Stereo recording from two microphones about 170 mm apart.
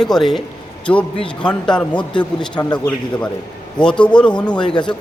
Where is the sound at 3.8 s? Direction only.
5° left (ahead or behind).